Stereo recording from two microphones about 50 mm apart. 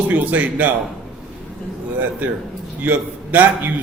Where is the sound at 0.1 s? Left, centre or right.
Right.